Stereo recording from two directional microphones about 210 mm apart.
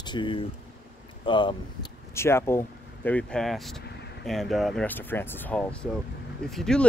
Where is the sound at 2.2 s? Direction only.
10° left (ahead or behind).